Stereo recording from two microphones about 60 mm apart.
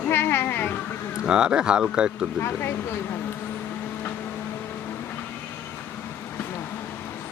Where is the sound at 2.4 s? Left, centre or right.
Left.